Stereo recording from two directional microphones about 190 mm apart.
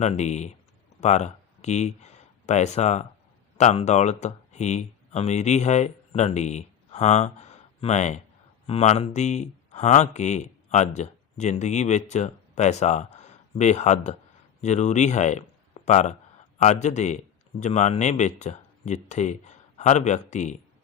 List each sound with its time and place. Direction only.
0.0 s speech: 35° left (ahead or behind)